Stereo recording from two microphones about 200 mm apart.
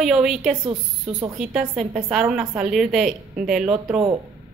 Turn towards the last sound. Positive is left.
turn(degrees=-5)  # may be behind; listen again after turning